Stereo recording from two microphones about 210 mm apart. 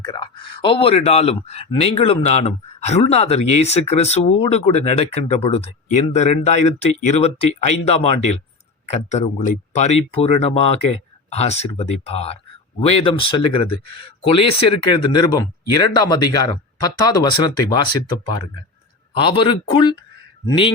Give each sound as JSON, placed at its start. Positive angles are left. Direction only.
{"t": 0.0, "sound": "speech", "side_deg": 20}
{"t": 19.1, "sound": "speech", "side_deg": 25}